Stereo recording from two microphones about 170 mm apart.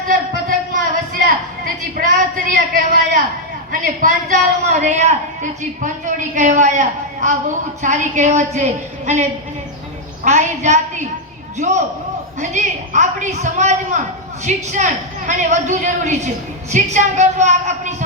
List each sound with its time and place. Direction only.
0.1 s a sound: 50° right (ahead or behind)
3.7 s a woman's voice: 50° right (ahead or behind)
10.2 s a woman's voice: 45° right (ahead or behind)